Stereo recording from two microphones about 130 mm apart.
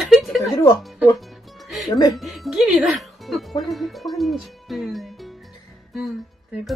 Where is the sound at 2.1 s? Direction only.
Centre (ahead or behind).